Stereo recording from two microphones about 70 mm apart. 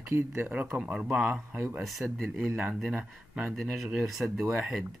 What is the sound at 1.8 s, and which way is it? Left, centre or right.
Speech, centre.